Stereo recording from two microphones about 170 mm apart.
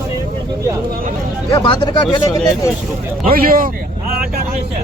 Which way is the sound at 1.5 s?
30° left (ahead or behind).